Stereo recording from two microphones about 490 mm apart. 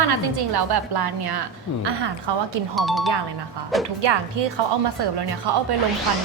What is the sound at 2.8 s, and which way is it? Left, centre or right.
Speech, centre.